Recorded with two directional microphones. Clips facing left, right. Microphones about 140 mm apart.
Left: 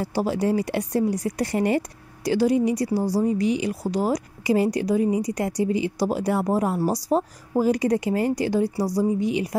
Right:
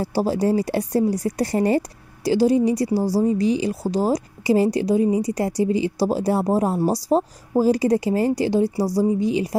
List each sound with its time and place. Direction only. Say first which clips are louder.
0.0 s a woman's voice: right 3 dB; 35° right (ahead or behind)